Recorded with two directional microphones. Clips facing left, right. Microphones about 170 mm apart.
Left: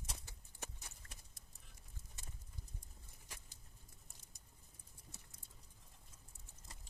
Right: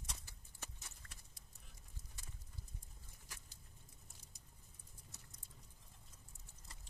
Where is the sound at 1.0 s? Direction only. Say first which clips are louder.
Left 1 dB; 30° left (ahead or behind).